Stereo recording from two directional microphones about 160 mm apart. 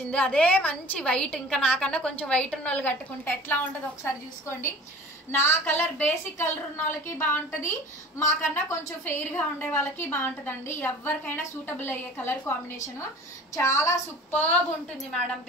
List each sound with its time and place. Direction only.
0.1 s a woman's voice: 5° left (ahead or behind)
13.6 s a woman's voice: 15° left (ahead or behind)